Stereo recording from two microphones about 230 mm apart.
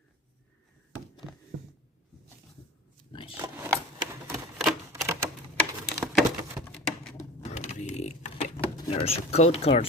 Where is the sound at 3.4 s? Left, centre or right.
Centre.